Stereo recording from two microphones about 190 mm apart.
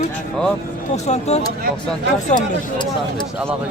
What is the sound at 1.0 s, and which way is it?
Speech, 35° left (ahead or behind).